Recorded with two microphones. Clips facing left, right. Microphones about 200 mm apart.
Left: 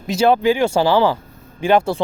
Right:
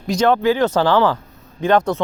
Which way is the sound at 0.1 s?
10° left (ahead or behind).